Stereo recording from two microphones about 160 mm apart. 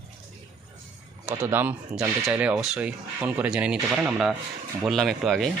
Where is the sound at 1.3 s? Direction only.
10° right (ahead or behind).